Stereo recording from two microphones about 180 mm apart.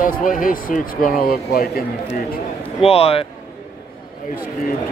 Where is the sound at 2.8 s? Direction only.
35° left (ahead or behind).